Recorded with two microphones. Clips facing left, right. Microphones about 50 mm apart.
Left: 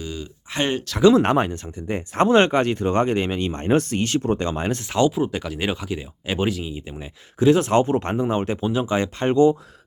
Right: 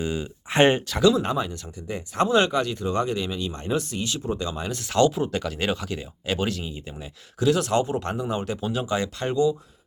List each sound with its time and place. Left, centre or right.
0.0 s speech: right
1.1 s speech: left
1.5 s speech: left
4.9 s speech: centre; by 9.5 s left